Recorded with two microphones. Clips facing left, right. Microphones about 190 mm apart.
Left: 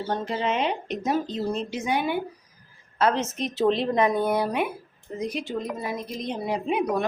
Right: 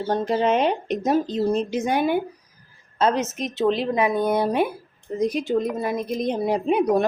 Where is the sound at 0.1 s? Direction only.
45° right (ahead or behind).